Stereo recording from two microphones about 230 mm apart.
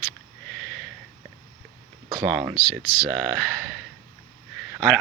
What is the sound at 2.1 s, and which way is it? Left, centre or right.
Speech, centre.